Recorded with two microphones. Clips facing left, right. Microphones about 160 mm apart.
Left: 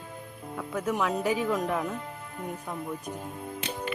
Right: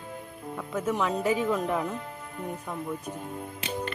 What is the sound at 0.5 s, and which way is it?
A woman's voice, 5° right (ahead or behind).